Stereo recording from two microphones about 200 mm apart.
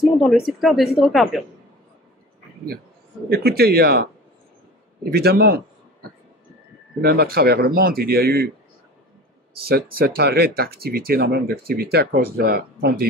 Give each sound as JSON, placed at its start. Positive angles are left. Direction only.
{"t": 0.0, "sound": "a sound", "side_deg": 0}
{"t": 0.5, "sound": "speech", "side_deg": 0}
{"t": 3.3, "sound": "speech", "side_deg": -50}
{"t": 5.1, "sound": "speech", "side_deg": -50}
{"t": 7.0, "sound": "speech", "side_deg": -50}
{"t": 9.6, "sound": "speech", "side_deg": -50}